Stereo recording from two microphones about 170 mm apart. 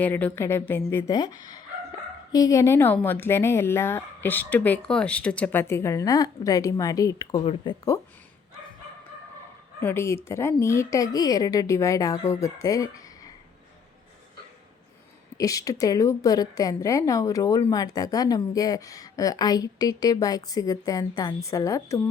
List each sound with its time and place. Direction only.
0.0 s a woman's voice: 10° left (ahead or behind); by 7.9 s 25° left (ahead or behind)
9.8 s a woman's voice: 15° left (ahead or behind)
15.4 s a woman's voice: 20° left (ahead or behind)